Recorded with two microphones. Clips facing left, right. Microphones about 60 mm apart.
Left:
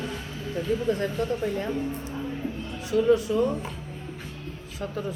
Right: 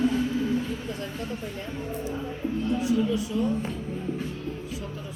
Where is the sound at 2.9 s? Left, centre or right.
Left.